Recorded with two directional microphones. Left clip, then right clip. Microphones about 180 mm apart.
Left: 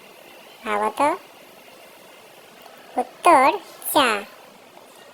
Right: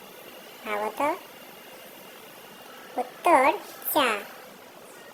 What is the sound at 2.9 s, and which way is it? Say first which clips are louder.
A child's voice: left 5 dB; 35° left (ahead or behind).